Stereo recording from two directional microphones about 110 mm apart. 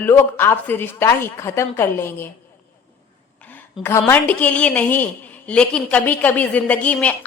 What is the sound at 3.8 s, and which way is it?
A woman's voice, 20° left (ahead or behind).